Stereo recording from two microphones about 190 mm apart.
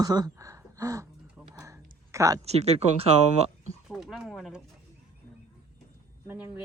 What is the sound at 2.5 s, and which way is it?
Speech, 35° right (ahead or behind).